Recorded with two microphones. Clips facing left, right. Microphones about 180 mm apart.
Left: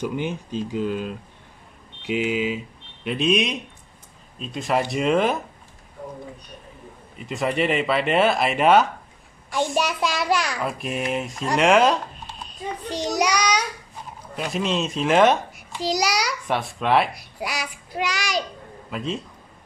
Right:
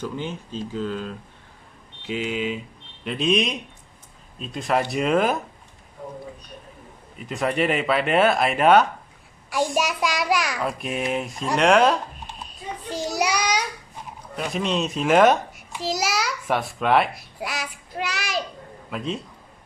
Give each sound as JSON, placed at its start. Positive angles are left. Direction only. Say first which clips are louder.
{"t": 0.0, "sound": "a child's voice", "louder": "left 3 dB", "side_deg": 10}
{"t": 7.2, "sound": "a child's voice", "louder": "even", "side_deg": 0}